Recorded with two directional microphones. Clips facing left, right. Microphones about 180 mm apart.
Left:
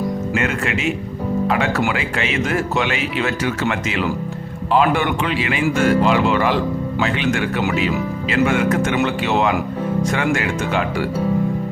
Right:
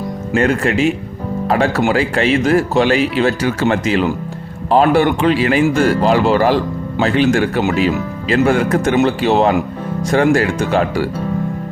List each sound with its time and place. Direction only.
0.3 s speech: 35° right (ahead or behind)